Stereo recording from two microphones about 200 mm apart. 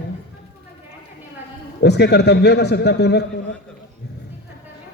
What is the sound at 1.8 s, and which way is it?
A man's voice, 55° left (ahead or behind).